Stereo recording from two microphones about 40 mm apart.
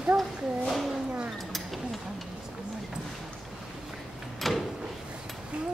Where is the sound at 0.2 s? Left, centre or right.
Centre.